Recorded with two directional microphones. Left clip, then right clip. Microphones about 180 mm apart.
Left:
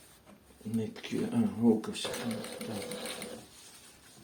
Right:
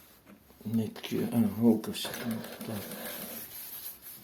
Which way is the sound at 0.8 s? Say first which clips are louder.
Right 2 dB; 45° right (ahead or behind).